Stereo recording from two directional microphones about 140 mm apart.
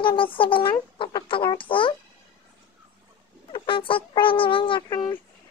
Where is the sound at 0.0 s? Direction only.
35° left (ahead or behind).